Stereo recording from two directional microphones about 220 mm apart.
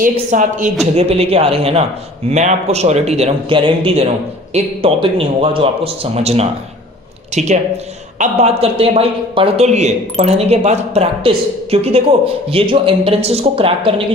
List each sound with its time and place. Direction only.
0.0 s a woman's voice: 35° right (ahead or behind)
8.6 s speech: 25° right (ahead or behind)